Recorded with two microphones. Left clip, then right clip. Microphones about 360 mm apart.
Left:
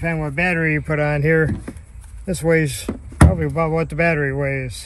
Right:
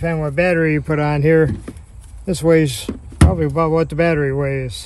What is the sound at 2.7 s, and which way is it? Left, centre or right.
Door, centre.